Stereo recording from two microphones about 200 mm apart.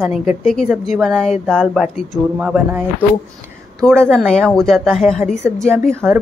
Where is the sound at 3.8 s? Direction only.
5° left (ahead or behind).